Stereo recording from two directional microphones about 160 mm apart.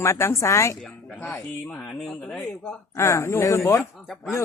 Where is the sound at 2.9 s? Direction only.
15° left (ahead or behind).